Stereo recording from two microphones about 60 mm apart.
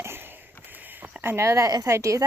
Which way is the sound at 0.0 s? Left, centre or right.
Right.